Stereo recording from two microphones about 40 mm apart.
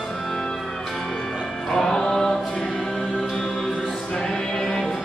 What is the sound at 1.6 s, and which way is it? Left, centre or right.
Music, centre.